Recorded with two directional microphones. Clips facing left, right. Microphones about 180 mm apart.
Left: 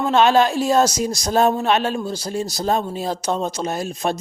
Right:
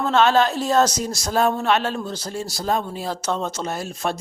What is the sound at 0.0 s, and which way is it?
Speech, 15° left (ahead or behind).